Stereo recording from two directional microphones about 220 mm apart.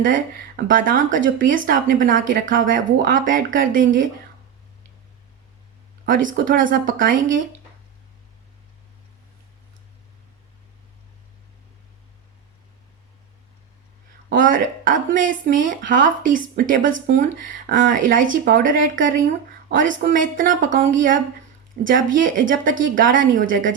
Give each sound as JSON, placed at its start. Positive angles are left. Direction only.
{"t": 0.0, "sound": "speech", "side_deg": -40}
{"t": 6.1, "sound": "speech", "side_deg": -35}
{"t": 14.3, "sound": "speech", "side_deg": -35}